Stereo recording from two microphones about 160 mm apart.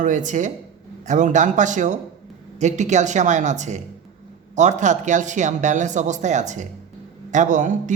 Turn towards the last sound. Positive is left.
turn(degrees=-55)  # may be behind; listen again after turning